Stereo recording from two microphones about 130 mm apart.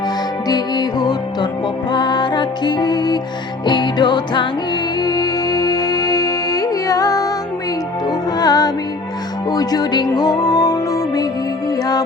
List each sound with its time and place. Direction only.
0.4 s music: 30° left (ahead or behind)